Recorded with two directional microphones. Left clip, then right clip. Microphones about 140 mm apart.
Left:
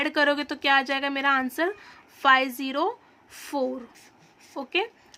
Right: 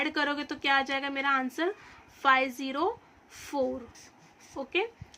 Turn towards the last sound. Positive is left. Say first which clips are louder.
# left 3 dB
turn(degrees=35)  # may be behind; listen again after turning